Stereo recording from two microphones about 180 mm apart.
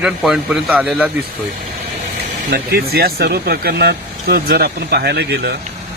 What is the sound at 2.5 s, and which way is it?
Speech, 60° right (ahead or behind).